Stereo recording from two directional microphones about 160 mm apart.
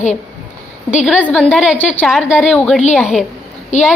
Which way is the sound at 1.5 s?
5° right (ahead or behind).